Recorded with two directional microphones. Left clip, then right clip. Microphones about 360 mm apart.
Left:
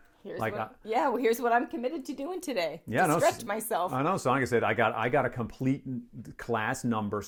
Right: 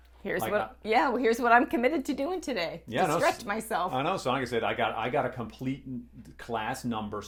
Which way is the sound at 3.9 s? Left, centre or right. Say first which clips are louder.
Left 1 dB; left.